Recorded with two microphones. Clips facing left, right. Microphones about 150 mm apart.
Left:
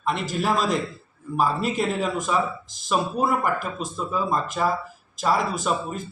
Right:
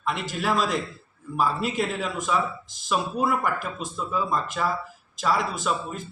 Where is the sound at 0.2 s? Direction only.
45° left (ahead or behind).